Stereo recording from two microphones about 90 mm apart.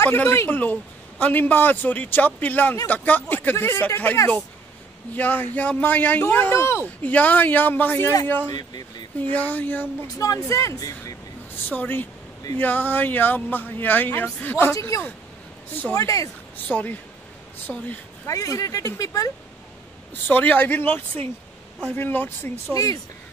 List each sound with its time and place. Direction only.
0.0 s speech: 25° left (ahead or behind)
8.5 s speech: 50° left (ahead or behind)
9.3 s speech: 20° left (ahead or behind)
10.1 s speech: 40° left (ahead or behind)
11.7 s speech: 20° left (ahead or behind)
14.7 s speech: 35° left (ahead or behind)
16.6 s speech: 20° left (ahead or behind)
18.2 s speech: 40° left (ahead or behind)
20.2 s speech: 20° left (ahead or behind)